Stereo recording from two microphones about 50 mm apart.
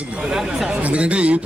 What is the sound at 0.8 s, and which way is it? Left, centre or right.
Speech, right.